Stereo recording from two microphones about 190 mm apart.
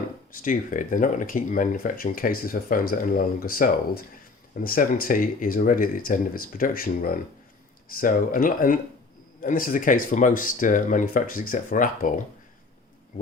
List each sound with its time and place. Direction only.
0.4 s speech: 45° left (ahead or behind)